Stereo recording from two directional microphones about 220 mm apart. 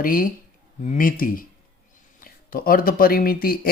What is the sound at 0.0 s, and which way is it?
Speech, 40° left (ahead or behind).